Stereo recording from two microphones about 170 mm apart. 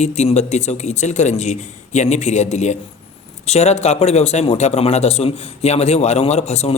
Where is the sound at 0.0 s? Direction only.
40° left (ahead or behind).